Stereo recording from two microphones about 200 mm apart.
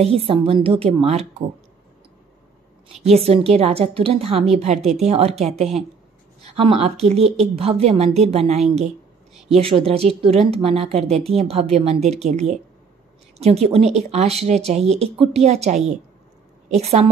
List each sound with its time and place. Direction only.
0.0 s a woman's voice: 30° right (ahead or behind)
3.2 s a woman's voice: 30° right (ahead or behind)
9.8 s a woman's voice: 30° right (ahead or behind)